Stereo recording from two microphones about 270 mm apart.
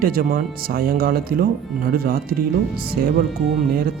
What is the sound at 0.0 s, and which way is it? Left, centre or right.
Speech, right.